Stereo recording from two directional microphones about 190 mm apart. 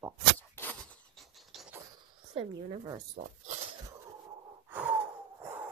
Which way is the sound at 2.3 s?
30° right (ahead or behind).